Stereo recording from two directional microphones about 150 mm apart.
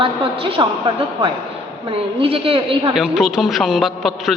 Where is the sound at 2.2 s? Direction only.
40° right (ahead or behind).